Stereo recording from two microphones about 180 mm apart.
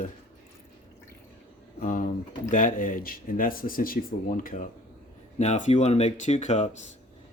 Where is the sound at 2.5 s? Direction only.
45° left (ahead or behind).